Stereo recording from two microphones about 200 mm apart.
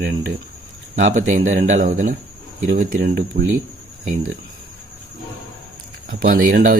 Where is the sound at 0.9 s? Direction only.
40° right (ahead or behind).